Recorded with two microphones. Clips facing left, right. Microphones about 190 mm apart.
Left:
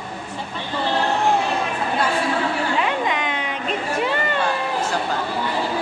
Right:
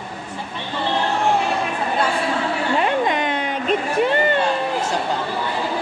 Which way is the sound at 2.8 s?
40° right (ahead or behind).